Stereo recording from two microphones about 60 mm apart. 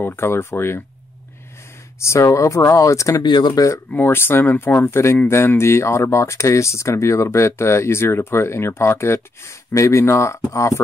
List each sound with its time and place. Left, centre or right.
0.0 s speech: left
2.0 s speech: left
3.9 s speech: left